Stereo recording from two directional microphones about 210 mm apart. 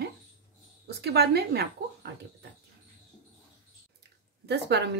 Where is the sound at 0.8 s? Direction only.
50° right (ahead or behind).